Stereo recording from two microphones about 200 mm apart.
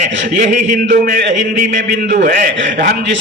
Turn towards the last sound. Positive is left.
turn(degrees=-55)  # may be behind; listen again after turning